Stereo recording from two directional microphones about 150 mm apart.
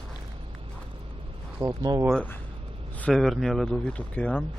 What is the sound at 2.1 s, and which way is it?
Speech, 10° left (ahead or behind).